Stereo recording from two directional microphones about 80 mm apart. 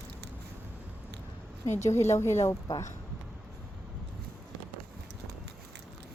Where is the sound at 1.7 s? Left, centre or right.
Left.